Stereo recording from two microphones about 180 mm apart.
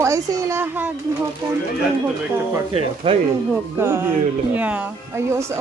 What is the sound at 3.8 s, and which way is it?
Speech, 15° right (ahead or behind).